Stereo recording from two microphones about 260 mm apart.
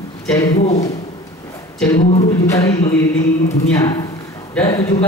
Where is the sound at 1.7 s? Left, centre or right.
Centre.